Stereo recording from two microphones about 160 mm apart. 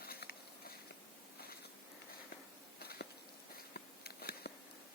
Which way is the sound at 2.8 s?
80° left.